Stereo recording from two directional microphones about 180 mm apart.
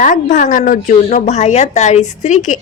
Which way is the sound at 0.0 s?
45° left (ahead or behind).